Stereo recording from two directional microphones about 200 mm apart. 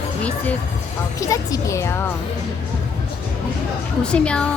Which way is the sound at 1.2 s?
15° left (ahead or behind).